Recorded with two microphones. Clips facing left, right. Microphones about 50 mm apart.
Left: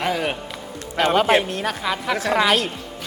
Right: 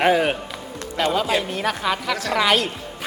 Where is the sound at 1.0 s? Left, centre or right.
Left.